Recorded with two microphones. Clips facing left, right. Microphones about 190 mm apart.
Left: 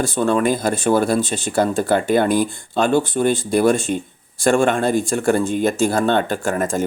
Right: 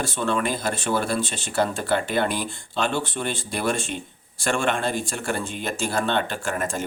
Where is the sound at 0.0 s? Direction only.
40° left (ahead or behind).